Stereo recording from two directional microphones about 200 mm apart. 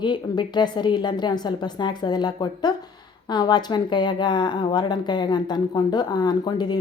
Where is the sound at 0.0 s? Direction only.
20° left (ahead or behind).